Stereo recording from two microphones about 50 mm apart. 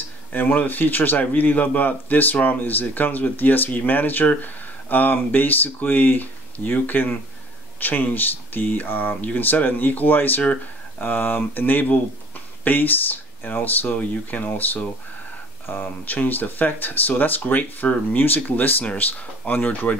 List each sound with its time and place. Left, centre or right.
0.3 s speech: left